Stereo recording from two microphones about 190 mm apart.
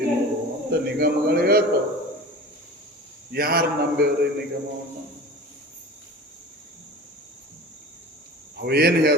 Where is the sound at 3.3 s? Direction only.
55° right (ahead or behind).